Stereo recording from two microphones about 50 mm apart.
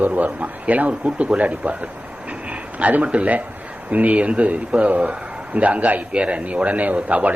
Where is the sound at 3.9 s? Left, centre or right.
Right.